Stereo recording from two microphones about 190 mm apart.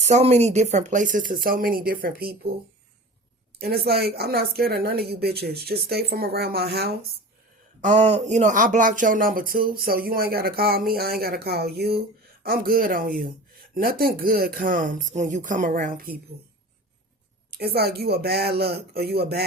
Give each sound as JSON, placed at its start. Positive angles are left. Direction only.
{"t": 0.0, "sound": "speech", "side_deg": -35}
{"t": 3.6, "sound": "speech", "side_deg": -55}
{"t": 7.8, "sound": "speech", "side_deg": -40}
{"t": 17.5, "sound": "speech", "side_deg": -55}